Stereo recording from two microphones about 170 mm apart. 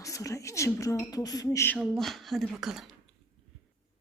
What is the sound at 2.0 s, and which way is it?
Speech, centre (ahead or behind).